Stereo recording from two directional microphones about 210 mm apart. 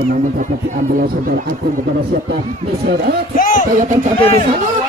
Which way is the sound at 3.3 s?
40° left (ahead or behind).